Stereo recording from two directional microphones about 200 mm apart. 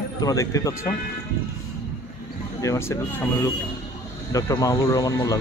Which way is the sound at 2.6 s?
15° left (ahead or behind).